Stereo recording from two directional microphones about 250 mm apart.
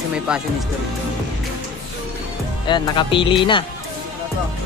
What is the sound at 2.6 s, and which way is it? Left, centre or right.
Speech, centre.